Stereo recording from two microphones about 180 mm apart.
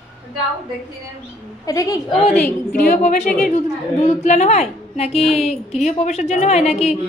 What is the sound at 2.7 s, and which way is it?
A woman's voice, 50° left (ahead or behind).